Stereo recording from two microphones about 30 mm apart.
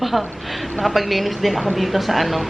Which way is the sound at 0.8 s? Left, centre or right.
Centre.